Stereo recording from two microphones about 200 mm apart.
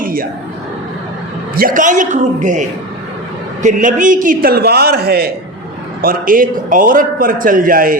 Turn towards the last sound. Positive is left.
turn(degrees=-45)  # may be behind; listen again after turning